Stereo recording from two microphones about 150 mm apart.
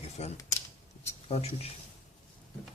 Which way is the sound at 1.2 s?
45° left (ahead or behind).